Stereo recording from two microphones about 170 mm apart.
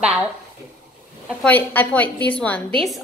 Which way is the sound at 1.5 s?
10° left (ahead or behind).